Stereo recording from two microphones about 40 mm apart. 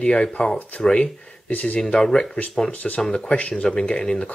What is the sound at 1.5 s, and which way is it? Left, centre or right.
Speech, left.